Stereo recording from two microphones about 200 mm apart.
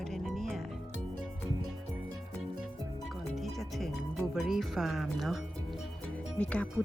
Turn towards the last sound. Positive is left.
turn(degrees=5)  # may be behind; listen again after turning